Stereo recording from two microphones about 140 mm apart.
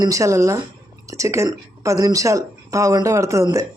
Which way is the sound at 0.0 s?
20° right (ahead or behind).